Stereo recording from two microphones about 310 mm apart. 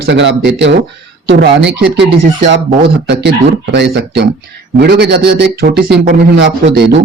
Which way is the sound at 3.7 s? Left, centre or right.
Right.